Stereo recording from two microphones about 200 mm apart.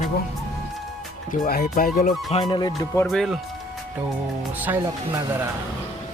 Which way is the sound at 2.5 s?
20° left (ahead or behind).